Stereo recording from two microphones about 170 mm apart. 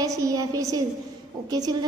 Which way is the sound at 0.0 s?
20° right (ahead or behind).